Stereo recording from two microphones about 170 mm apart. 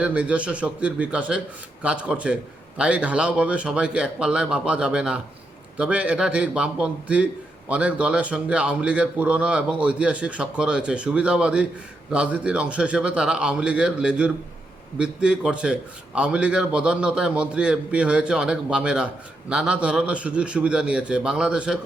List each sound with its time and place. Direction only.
0.0 s a man's voice: 10° right (ahead or behind)